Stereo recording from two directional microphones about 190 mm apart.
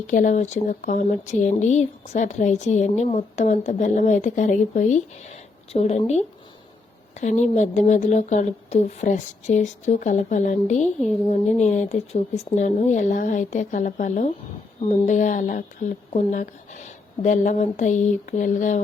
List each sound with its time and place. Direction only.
0.1 s speech: 40° left (ahead or behind)